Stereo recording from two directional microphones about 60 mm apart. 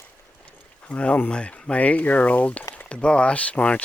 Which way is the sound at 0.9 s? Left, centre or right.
Left.